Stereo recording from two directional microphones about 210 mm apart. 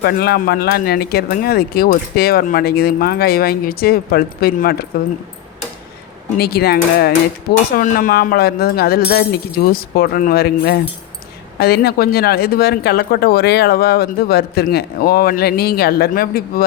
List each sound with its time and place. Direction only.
0.0 s speech: 50° left (ahead or behind)
6.3 s speech: 50° left (ahead or behind)